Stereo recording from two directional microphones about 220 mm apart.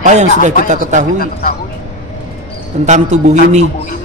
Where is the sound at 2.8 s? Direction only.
35° right (ahead or behind).